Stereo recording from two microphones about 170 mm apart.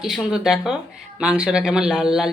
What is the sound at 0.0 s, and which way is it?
Speech, centre (ahead or behind).